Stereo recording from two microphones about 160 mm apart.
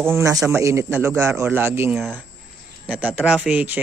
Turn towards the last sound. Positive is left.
turn(degrees=-10)  # may be behind; listen again after turning